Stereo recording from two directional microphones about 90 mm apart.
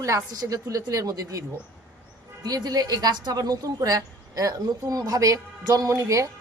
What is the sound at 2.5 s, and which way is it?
A woman's voice, 45° right (ahead or behind).